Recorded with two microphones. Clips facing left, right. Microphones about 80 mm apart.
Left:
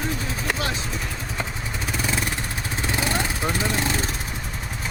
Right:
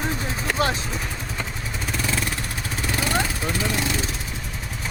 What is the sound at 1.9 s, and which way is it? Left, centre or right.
Vehicle, centre.